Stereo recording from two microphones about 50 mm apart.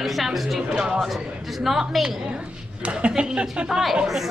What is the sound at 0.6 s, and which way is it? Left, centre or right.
Speech, centre.